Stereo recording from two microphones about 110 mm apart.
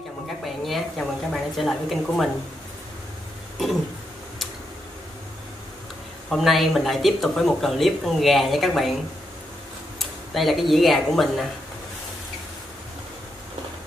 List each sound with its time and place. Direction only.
0.7 s speech: centre (ahead or behind)
6.3 s speech: centre (ahead or behind)
9.9 s speech: centre (ahead or behind)